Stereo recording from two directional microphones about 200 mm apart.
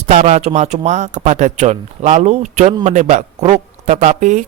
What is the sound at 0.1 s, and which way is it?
Speech, 35° right (ahead or behind).